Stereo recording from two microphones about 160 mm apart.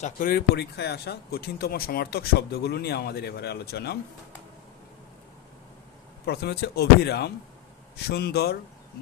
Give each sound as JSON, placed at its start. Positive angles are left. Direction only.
{"t": 0.0, "sound": "speech", "side_deg": 65}
{"t": 6.2, "sound": "speech", "side_deg": 85}